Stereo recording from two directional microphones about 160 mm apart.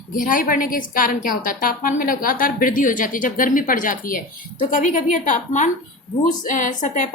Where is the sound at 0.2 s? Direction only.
55° left (ahead or behind).